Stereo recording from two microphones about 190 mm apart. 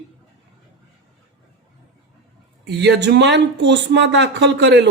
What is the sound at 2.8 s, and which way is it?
Speech, 65° right (ahead or behind).